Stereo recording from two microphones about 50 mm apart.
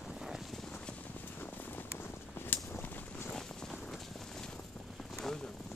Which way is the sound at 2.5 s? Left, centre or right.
Left.